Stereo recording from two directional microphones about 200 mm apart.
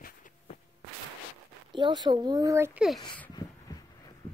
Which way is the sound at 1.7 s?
25° right (ahead or behind).